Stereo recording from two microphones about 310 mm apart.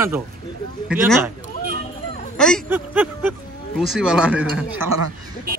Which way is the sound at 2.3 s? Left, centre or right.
Centre.